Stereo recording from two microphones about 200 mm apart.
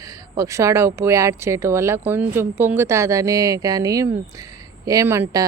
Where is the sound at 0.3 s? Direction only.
15° right (ahead or behind).